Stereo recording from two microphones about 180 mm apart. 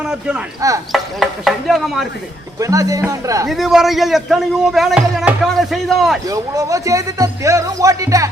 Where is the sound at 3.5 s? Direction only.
Centre (ahead or behind).